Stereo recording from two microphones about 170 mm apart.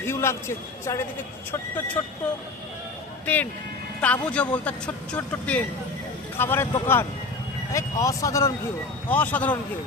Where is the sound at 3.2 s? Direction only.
10° left (ahead or behind).